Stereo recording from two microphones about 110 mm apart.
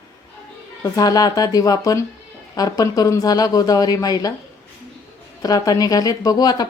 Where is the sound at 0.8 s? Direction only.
35° left (ahead or behind).